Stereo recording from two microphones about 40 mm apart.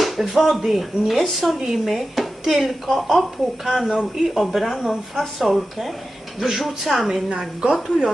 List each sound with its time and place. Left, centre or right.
0.0 s speech: centre
5.5 s speech: centre